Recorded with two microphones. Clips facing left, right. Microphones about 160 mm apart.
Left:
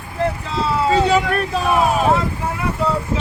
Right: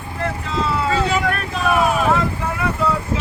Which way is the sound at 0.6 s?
35° left (ahead or behind).